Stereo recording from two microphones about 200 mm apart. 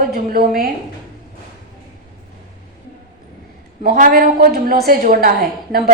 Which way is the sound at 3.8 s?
45° right (ahead or behind).